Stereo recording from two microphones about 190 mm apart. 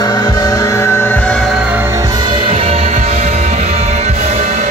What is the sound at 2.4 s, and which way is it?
Music, 30° right (ahead or behind).